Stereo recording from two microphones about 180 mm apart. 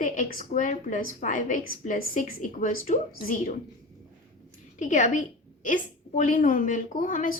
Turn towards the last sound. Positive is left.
turn(degrees=45)  # may be behind; listen again after turning